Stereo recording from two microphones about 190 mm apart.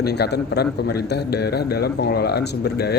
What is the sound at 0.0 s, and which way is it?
A man's voice, 60° left (ahead or behind).